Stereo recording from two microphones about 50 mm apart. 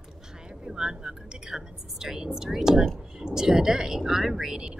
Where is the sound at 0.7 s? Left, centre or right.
Centre.